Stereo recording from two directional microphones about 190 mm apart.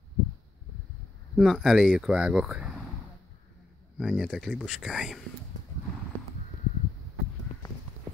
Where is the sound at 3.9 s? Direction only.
Centre (ahead or behind).